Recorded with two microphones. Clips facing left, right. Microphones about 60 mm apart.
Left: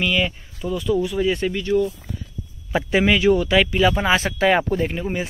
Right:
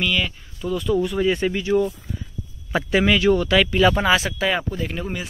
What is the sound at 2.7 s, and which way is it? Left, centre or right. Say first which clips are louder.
Speech: even; centre.